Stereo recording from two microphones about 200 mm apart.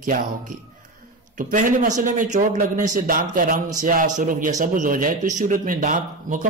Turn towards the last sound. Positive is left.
turn(degrees=-40)  # may be behind; listen again after turning